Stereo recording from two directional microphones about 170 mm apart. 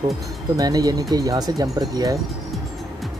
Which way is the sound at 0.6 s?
20° right (ahead or behind).